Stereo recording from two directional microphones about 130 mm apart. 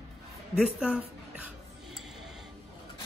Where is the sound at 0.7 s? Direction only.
5° right (ahead or behind).